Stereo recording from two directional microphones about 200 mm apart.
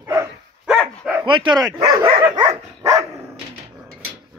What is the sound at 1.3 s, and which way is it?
Speech, 25° right (ahead or behind).